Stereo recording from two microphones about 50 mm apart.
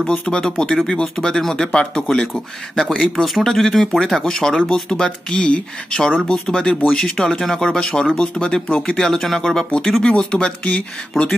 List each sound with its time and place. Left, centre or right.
0.0 s speech: centre
10.0 s speech: centre